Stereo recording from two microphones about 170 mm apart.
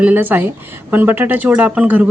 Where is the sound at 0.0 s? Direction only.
10° right (ahead or behind).